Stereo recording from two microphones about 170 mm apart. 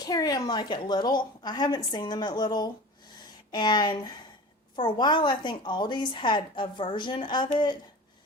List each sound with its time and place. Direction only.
0.0 s a woman's voice: 20° left (ahead or behind)